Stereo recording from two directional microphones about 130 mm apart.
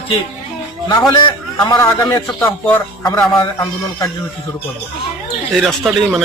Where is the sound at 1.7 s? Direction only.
25° left (ahead or behind).